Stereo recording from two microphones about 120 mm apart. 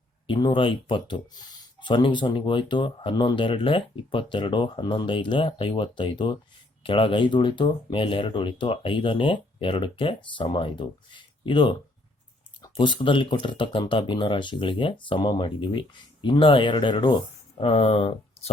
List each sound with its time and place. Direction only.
0.3 s speech: 40° left (ahead or behind)
17.6 s speech: 55° left (ahead or behind)